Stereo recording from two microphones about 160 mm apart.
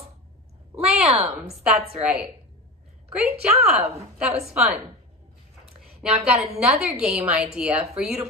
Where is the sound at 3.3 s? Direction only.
40° right (ahead or behind).